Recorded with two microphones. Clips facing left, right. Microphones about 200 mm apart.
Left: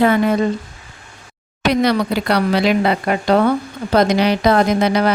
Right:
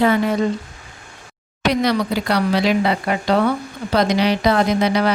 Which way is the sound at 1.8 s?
60° left (ahead or behind).